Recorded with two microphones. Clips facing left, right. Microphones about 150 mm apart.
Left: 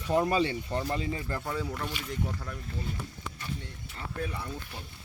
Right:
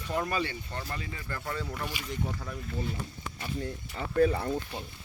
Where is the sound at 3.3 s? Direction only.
60° right (ahead or behind).